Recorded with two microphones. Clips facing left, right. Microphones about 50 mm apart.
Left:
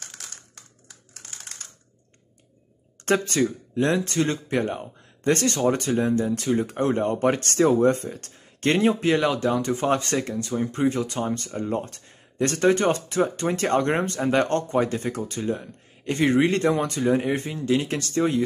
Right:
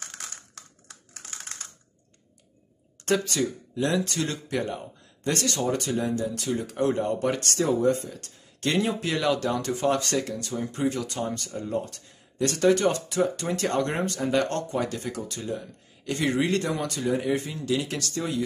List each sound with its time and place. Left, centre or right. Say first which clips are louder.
0.6 s typing: right 2 dB; centre
3.1 s speech: left 3 dB; left